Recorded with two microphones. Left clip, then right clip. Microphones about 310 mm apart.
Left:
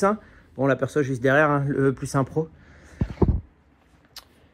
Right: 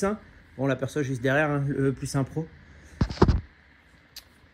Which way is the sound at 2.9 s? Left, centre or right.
Centre.